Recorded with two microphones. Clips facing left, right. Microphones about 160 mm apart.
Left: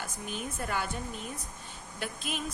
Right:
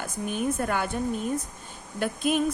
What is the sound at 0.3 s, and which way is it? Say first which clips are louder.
A woman's voice: right 9 dB; 55° right (ahead or behind).